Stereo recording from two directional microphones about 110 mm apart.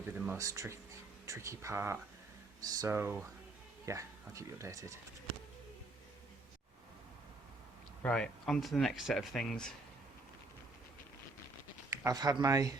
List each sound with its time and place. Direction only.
0.0 s a sound: 15° right (ahead or behind)
0.3 s speech: 30° right (ahead or behind)
2.9 s speech: 20° right (ahead or behind)
8.0 s speech: 10° left (ahead or behind)
11.9 s speech: 30° right (ahead or behind)